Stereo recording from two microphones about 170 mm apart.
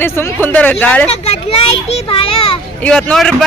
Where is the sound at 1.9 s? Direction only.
30° left (ahead or behind).